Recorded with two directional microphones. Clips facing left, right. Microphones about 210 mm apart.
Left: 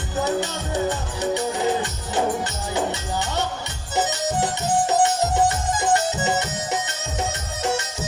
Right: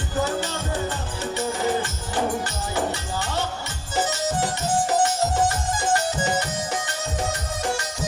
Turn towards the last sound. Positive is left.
turn(degrees=20)  # may be behind; listen again after turning